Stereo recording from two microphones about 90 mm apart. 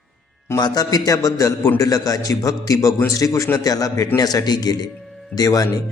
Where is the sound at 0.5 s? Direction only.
45° left (ahead or behind).